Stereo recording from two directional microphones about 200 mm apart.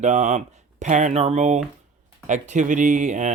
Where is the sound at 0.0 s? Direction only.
35° right (ahead or behind).